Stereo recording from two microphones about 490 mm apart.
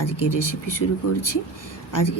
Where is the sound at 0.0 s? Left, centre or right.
Left.